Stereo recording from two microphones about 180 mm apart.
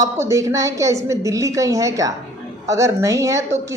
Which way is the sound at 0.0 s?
15° right (ahead or behind).